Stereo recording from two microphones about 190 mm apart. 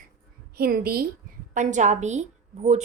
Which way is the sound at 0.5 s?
50° right (ahead or behind).